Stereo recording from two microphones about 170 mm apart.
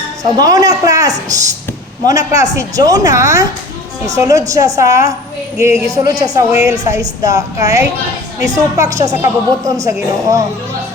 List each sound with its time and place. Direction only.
0.2 s a woman's voice: 20° right (ahead or behind)